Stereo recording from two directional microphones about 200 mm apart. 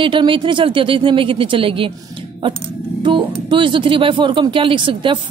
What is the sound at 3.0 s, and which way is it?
Speech, 25° right (ahead or behind).